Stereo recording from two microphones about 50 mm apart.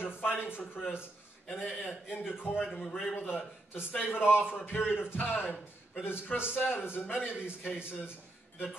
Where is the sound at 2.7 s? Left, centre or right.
Centre.